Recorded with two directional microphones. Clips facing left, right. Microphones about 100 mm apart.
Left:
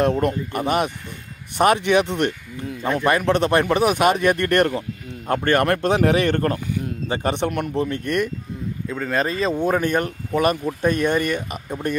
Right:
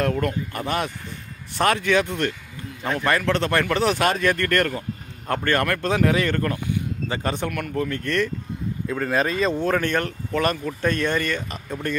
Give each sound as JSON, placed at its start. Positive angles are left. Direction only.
{"t": 0.0, "sound": "speech", "side_deg": 20}
{"t": 7.1, "sound": "speech", "side_deg": 20}
{"t": 8.8, "sound": "speech", "side_deg": -5}
{"t": 9.6, "sound": "speech", "side_deg": 15}